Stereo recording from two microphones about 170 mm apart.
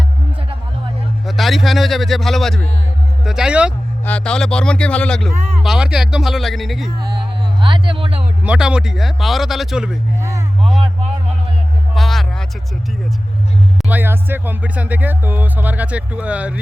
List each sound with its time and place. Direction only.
1.3 s speech: centre (ahead or behind)
4.0 s speech: 5° left (ahead or behind)
7.0 s music: 25° right (ahead or behind)
8.4 s speech: 5° right (ahead or behind)
11.9 s music: centre (ahead or behind)
13.8 s music: 10° right (ahead or behind)